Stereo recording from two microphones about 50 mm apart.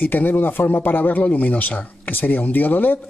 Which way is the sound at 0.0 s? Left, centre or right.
Left.